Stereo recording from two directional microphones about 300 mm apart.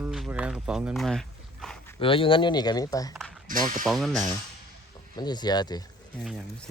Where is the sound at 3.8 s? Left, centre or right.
Centre.